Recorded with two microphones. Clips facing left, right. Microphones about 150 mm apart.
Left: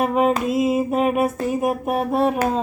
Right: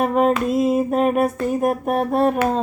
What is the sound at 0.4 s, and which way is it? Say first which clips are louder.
Speech: right 1 dB; 5° left (ahead or behind).